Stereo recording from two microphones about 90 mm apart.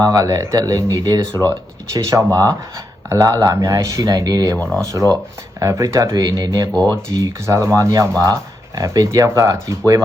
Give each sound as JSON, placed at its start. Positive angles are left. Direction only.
{"t": 0.0, "sound": "speech", "side_deg": -40}
{"t": 4.6, "sound": "speech", "side_deg": 10}
{"t": 4.9, "sound": "speech", "side_deg": -40}
{"t": 6.1, "sound": "speech", "side_deg": -45}